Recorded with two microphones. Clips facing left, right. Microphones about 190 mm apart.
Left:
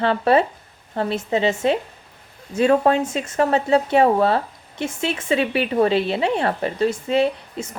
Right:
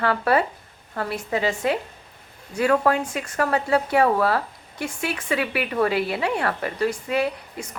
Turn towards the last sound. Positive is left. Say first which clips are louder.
# left 3 dB
turn(degrees=25)  # may be behind; listen again after turning